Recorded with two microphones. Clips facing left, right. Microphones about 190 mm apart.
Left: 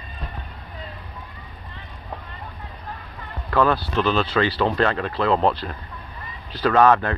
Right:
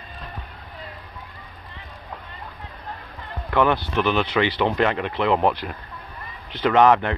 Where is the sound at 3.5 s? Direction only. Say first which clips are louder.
Even; 20° right (ahead or behind).